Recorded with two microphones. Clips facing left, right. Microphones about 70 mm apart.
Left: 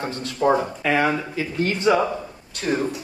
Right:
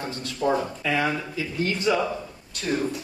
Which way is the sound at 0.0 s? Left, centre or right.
Left.